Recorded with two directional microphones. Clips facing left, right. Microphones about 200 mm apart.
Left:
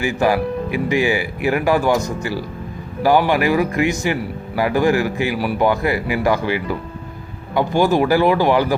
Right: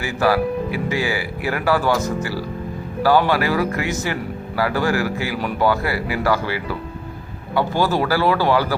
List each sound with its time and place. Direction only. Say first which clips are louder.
0.0 s speech: left 1 dB; 15° left (ahead or behind)